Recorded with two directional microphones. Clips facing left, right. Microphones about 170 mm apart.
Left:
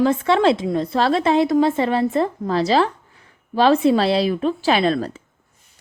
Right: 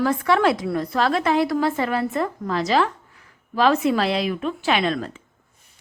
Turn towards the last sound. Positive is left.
turn(degrees=35)  # may be behind; listen again after turning